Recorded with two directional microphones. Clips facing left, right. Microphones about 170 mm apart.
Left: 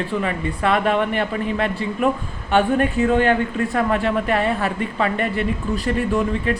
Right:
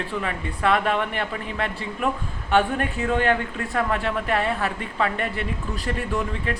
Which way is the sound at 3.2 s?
Centre (ahead or behind).